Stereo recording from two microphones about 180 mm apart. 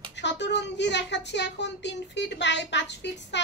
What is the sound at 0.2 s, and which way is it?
Child singing, 75° left (ahead or behind).